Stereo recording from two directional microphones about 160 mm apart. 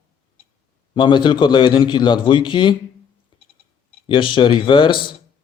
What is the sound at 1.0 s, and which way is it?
Speech, 30° left (ahead or behind).